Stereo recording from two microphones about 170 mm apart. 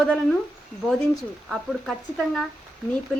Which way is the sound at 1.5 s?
Centre (ahead or behind).